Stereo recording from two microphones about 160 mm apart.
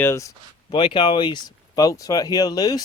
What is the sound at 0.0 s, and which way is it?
Speech, 20° left (ahead or behind).